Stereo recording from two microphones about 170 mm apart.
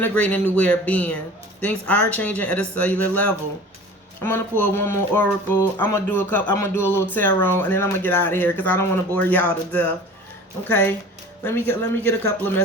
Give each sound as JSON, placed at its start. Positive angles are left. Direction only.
{"t": 0.0, "sound": "speech", "side_deg": 10}